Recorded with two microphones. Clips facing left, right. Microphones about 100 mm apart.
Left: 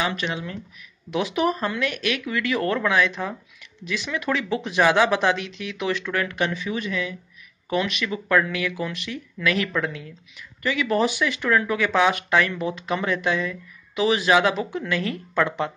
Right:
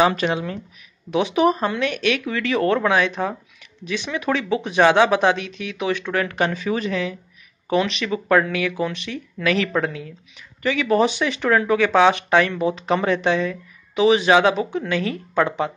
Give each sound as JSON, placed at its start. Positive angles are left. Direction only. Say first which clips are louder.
{"t": 0.0, "sound": "speech", "louder": "right 8 dB", "side_deg": -35}